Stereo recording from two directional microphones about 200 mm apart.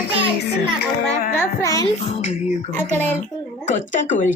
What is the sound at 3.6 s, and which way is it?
Speech, 40° left (ahead or behind).